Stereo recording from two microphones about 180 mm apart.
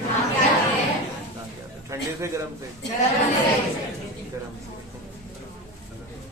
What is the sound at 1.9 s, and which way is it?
Speech, 15° right (ahead or behind).